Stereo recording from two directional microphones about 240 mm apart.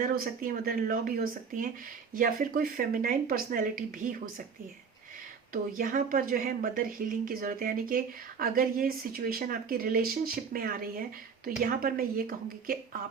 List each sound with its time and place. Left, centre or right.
0.0 s a woman's voice: right
5.7 s a woman's voice: right